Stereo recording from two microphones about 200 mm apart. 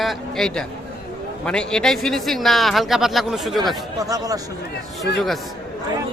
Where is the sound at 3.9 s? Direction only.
15° right (ahead or behind).